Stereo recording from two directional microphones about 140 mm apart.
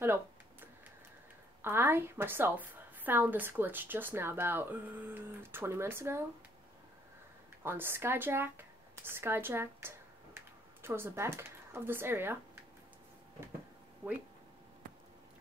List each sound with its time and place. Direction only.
0.0 s computer keyboard: 15° right (ahead or behind)
1.6 s a woman's voice: 15° right (ahead or behind)
7.6 s speech: 15° right (ahead or behind)